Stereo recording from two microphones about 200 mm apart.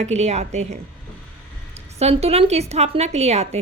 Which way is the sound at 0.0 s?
35° right (ahead or behind).